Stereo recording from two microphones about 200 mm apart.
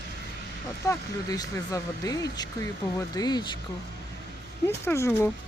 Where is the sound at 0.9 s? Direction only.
15° left (ahead or behind).